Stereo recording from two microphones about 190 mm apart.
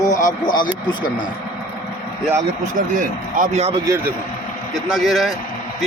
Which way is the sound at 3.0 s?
45° right (ahead or behind).